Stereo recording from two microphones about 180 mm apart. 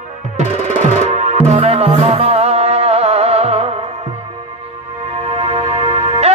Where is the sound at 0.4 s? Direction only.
40° right (ahead or behind).